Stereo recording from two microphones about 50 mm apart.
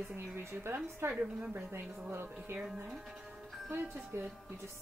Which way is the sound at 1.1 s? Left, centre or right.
Right.